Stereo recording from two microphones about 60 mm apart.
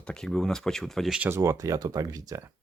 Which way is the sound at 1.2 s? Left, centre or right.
Right.